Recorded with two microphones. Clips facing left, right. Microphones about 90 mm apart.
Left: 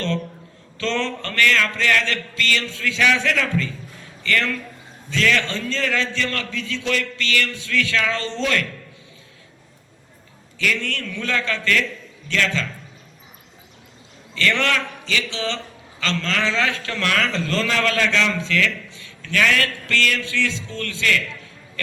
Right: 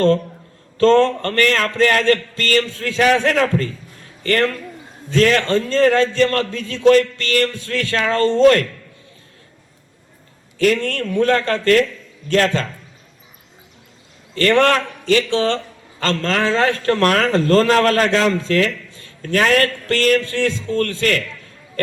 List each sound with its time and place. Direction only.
0.8 s a man's voice: 45° right (ahead or behind)
10.6 s a man's voice: 45° right (ahead or behind)
14.3 s a man's voice: 45° right (ahead or behind)